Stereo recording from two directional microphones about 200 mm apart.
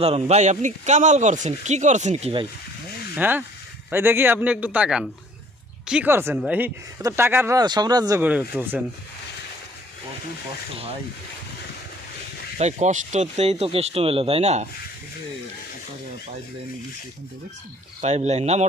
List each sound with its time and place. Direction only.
0.0 s speech: 30° right (ahead or behind)
3.2 s speech: 10° right (ahead or behind)
8.2 s speech: 10° right (ahead or behind)
12.5 s speech: 35° right (ahead or behind)
18.0 s speech: 35° right (ahead or behind)